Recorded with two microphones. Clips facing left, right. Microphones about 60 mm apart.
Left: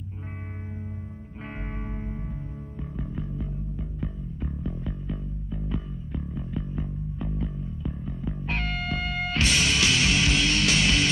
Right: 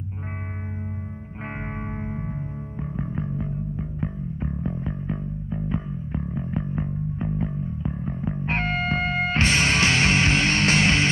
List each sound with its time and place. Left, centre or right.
1.4 s music: right